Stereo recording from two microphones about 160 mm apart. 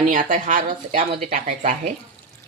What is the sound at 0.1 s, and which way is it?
Speech, 55° right (ahead or behind).